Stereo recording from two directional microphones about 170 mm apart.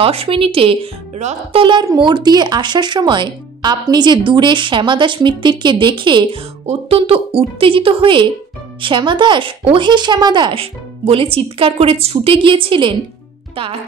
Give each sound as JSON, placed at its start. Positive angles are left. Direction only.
{"t": 0.0, "sound": "speech", "side_deg": -35}